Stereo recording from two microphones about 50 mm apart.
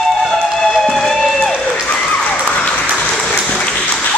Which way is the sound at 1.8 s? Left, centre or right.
Left.